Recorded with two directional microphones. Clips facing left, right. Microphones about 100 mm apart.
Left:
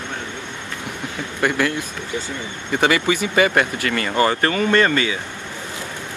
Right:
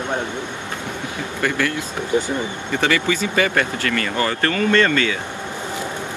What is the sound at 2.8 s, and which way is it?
Speech, 20° left (ahead or behind).